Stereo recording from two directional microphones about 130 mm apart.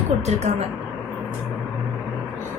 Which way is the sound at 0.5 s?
65° right (ahead or behind).